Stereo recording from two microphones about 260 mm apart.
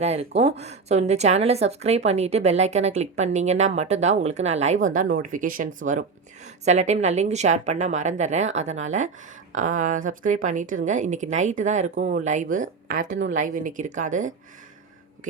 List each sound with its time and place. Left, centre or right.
0.0 s speech: right